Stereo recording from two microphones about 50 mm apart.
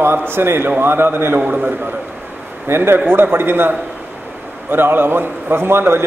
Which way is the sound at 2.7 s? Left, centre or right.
Right.